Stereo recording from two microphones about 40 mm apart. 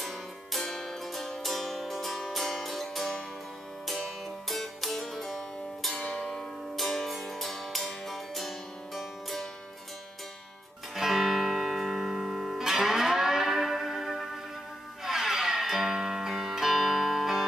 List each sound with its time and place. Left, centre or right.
0.0 s music: centre
5.9 s music: left
6.8 s music: centre
11.0 s music: centre